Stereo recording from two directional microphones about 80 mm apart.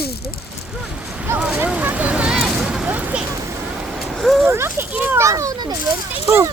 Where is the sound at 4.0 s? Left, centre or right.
Centre.